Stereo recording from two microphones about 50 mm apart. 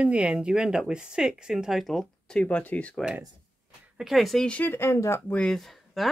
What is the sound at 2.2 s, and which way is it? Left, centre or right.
Speech, left.